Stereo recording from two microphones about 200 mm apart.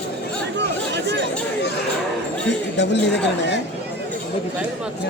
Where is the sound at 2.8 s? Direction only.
60° left (ahead or behind).